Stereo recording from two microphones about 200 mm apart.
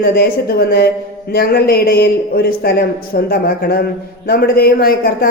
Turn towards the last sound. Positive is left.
turn(degrees=50)  # may be behind; listen again after turning